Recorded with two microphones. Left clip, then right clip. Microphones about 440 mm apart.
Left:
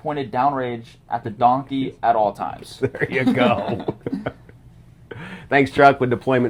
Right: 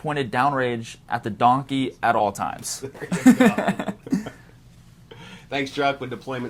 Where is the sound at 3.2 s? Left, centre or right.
Right.